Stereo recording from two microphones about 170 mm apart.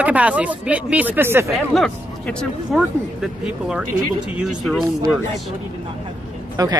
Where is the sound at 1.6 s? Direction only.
Centre (ahead or behind).